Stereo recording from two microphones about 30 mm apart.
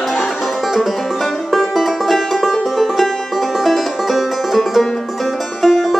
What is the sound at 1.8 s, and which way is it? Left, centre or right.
Music, centre.